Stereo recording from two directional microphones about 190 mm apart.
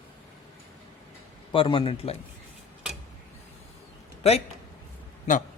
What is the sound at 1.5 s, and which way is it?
Speech, 25° left (ahead or behind).